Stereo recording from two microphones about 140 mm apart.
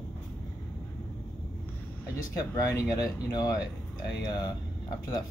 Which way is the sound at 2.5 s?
25° left (ahead or behind).